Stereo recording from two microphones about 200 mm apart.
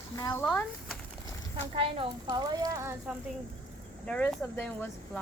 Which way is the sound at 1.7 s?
25° right (ahead or behind).